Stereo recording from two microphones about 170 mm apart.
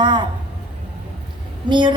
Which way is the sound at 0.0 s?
30° right (ahead or behind).